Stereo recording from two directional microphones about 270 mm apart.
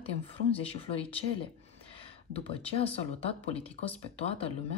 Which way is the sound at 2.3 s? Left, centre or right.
Left.